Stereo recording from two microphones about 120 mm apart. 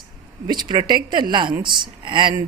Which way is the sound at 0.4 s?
35° right (ahead or behind).